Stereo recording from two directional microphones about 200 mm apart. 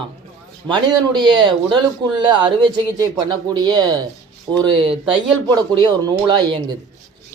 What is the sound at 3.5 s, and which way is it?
Speech, 20° right (ahead or behind).